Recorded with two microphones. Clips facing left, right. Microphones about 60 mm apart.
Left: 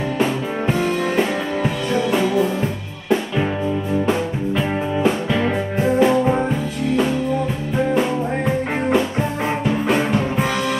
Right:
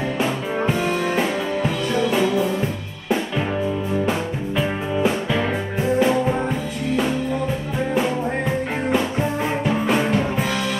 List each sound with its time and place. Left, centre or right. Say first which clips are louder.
0.7 s music: left 2 dB; centre
4.0 s music: left 3 dB; centre
9.8 s music: left 1 dB; centre